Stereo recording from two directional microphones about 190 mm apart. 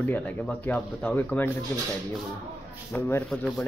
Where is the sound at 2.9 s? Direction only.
10° left (ahead or behind).